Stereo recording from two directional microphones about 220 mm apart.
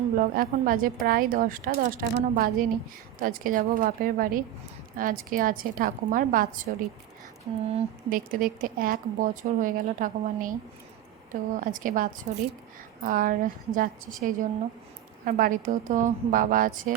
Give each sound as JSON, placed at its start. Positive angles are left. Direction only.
{"t": 0.2, "sound": "a woman's voice", "side_deg": -40}